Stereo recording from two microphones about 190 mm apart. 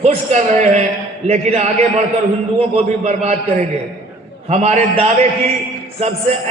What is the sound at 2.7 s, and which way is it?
A man's voice, 35° right (ahead or behind).